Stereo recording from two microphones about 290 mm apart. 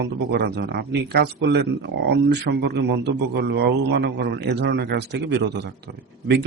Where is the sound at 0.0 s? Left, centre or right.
Right.